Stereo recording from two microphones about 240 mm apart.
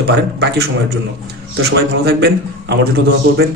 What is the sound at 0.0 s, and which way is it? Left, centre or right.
A man's voice, right.